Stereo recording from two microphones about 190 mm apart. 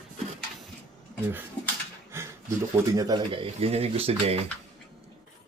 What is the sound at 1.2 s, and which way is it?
Speech, 10° right (ahead or behind).